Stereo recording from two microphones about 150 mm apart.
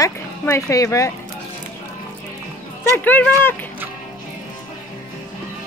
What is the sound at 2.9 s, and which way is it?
Speech, 10° left (ahead or behind).